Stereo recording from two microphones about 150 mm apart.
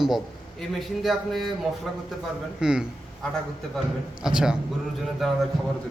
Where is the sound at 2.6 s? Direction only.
5° right (ahead or behind).